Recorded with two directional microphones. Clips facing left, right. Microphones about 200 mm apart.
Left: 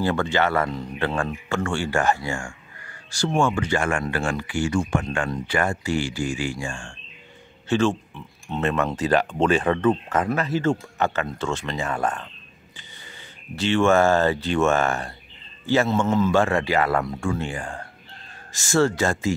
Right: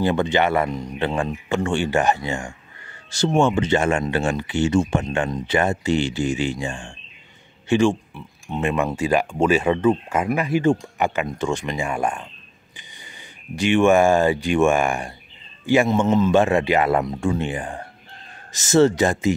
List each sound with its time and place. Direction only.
0.0 s speech: 20° right (ahead or behind)
13.6 s speech: 15° right (ahead or behind)